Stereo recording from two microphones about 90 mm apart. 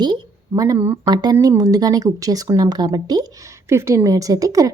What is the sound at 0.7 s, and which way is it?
Speech, 25° right (ahead or behind).